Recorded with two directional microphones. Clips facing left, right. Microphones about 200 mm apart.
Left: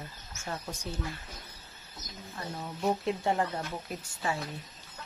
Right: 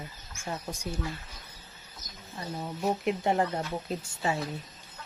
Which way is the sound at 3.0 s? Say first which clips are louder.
Right 2 dB; 20° right (ahead or behind).